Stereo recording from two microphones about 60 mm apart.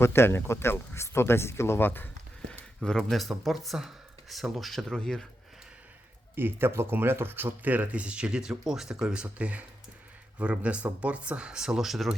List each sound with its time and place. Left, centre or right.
0.0 s speech: left
2.5 s a sound: centre
3.1 s speech: centre
6.3 s speech: right; by 9.2 s centre
9.2 s speech: right; by 12.1 s centre